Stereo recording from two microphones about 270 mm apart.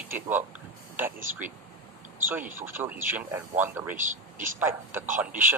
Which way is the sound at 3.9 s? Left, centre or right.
Right.